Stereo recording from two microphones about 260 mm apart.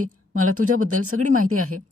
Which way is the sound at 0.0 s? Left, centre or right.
Right.